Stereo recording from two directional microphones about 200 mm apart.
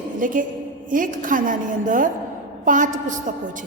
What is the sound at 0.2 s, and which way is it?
A woman's voice, 40° right (ahead or behind).